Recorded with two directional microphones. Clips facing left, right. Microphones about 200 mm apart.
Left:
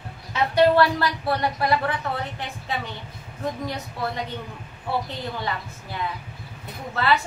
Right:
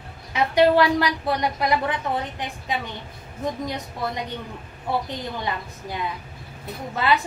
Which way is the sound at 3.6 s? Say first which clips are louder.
Right 1 dB; 15° right (ahead or behind).